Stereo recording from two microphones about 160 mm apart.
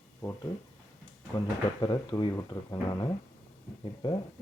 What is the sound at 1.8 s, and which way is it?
Speech, 25° left (ahead or behind).